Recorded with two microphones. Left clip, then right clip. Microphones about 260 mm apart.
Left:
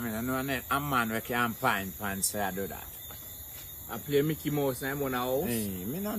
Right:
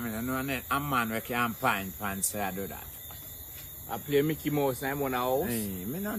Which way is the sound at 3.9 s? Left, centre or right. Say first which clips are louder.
Right 1 dB; right.